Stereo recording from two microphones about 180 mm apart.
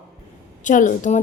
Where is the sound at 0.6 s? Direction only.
45° left (ahead or behind).